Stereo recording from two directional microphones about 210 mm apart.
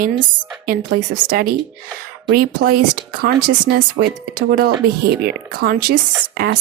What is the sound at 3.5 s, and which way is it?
Speech, 45° right (ahead or behind).